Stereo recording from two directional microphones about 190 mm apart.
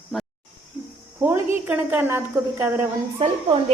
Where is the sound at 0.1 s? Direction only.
Centre (ahead or behind).